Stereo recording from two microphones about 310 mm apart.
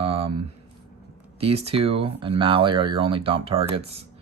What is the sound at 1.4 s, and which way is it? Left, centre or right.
Speech, centre.